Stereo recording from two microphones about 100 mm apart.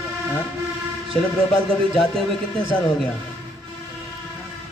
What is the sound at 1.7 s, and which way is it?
A man's voice, 5° left (ahead or behind).